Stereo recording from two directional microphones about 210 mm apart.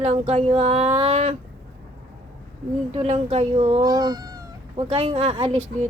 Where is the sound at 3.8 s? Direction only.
15° right (ahead or behind).